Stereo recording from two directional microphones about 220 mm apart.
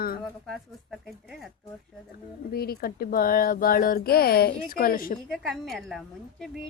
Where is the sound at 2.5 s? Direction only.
45° left (ahead or behind).